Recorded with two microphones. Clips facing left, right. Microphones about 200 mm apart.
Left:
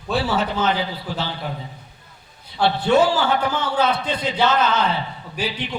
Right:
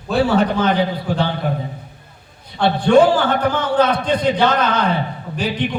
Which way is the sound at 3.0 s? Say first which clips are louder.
Right 4 dB; 55° right (ahead or behind).